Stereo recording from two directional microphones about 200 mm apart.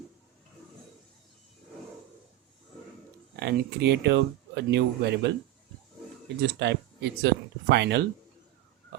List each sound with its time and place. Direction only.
3.3 s speech: 55° right (ahead or behind)
6.6 s speech: 55° right (ahead or behind)